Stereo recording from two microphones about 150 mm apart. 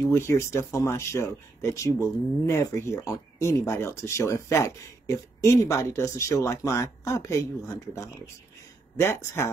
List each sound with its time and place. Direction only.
0.0 s speech: 20° left (ahead or behind)